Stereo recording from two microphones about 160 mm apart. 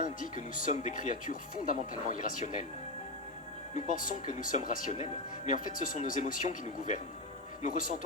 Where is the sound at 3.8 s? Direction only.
50° left (ahead or behind).